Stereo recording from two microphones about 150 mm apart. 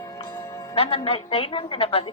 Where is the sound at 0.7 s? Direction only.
40° left (ahead or behind).